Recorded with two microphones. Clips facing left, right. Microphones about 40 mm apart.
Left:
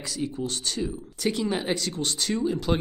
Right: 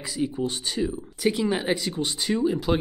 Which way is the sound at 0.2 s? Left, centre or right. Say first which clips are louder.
Right 4 dB; centre.